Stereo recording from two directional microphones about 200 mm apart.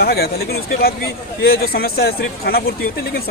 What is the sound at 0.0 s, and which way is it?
Speech, 50° left (ahead or behind).